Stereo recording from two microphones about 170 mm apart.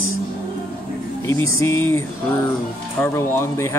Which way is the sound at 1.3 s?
15° left (ahead or behind).